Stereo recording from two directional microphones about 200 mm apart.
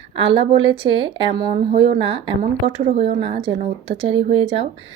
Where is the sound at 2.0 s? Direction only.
30° right (ahead or behind).